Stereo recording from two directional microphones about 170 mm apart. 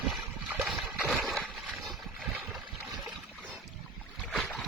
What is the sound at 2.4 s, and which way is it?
Boat, centre (ahead or behind).